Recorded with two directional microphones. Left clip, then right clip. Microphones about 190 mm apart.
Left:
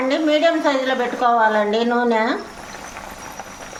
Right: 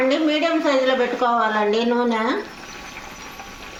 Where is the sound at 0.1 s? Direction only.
20° left (ahead or behind).